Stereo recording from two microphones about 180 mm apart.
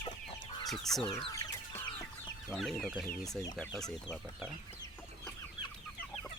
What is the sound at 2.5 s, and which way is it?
Speech, centre (ahead or behind).